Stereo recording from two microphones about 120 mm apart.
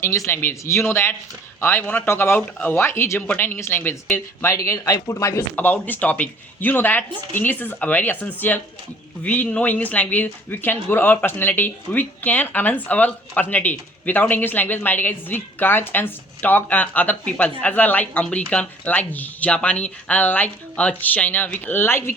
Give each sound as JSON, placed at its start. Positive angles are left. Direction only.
{"t": 0.3, "sound": "speech", "side_deg": 20}
{"t": 5.5, "sound": "speech", "side_deg": 15}